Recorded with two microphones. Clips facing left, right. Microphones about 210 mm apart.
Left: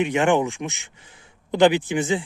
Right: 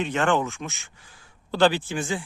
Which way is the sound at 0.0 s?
15° left (ahead or behind).